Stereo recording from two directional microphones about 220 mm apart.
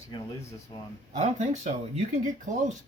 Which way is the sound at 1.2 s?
30° right (ahead or behind).